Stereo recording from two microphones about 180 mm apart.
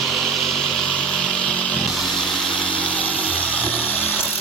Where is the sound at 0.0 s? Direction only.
Centre (ahead or behind).